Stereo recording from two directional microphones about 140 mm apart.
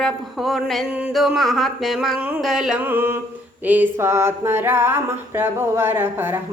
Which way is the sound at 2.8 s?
15° right (ahead or behind).